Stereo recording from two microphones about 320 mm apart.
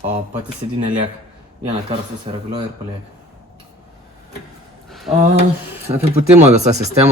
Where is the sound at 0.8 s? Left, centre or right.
Centre.